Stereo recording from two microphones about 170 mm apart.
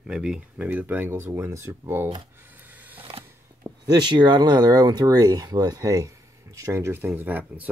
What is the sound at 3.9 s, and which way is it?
Speech, 25° right (ahead or behind).